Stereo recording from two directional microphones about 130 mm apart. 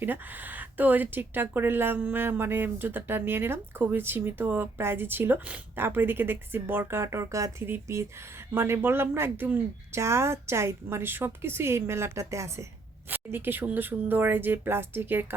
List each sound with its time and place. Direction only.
0.0 s speech: 15° right (ahead or behind)